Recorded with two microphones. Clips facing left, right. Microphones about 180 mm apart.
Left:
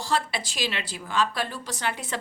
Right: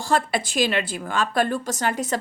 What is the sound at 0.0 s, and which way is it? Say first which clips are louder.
A woman's voice: right 5 dB; 50° right (ahead or behind).